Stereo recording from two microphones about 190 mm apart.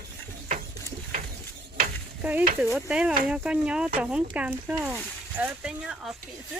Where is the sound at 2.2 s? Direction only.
10° right (ahead or behind).